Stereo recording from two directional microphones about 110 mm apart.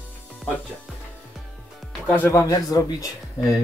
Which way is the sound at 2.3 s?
30° left (ahead or behind).